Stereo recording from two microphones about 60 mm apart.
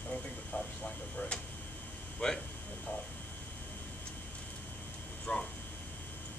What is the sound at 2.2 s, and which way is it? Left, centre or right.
Speech, centre.